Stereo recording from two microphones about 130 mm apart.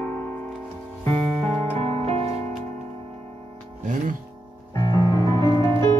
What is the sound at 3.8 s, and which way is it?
Music, 75° right (ahead or behind).